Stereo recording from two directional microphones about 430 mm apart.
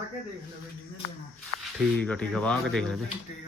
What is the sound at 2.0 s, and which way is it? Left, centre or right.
A man's voice, centre.